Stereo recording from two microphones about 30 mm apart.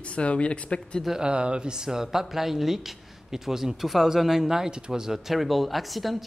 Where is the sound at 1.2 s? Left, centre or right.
Right.